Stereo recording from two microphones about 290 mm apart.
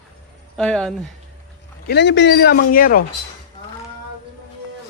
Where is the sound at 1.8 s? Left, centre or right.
Left.